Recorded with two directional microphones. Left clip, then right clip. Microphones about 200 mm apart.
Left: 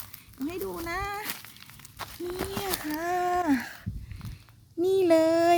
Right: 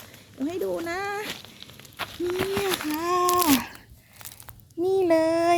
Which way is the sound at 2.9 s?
55° left (ahead or behind).